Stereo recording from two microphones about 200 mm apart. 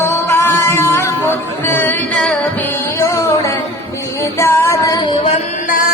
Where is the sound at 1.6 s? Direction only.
10° left (ahead or behind).